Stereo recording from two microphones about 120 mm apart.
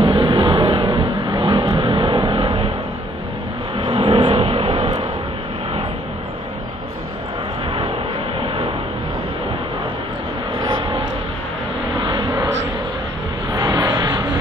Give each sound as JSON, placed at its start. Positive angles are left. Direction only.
{"t": 0.0, "sound": "vehicle", "side_deg": -45}
{"t": 1.8, "sound": "music", "side_deg": -45}
{"t": 3.9, "sound": "vehicle", "side_deg": -60}
{"t": 8.4, "sound": "vehicle", "side_deg": -50}
{"t": 10.6, "sound": "vehicle", "side_deg": -40}
{"t": 12.0, "sound": "a sound", "side_deg": -40}
{"t": 13.5, "sound": "a sound", "side_deg": -30}